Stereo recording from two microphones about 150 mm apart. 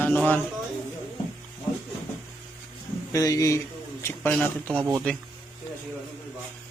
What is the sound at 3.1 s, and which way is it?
Speech, 20° left (ahead or behind).